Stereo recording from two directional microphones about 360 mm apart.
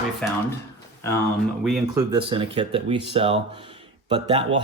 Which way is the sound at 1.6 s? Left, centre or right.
Centre.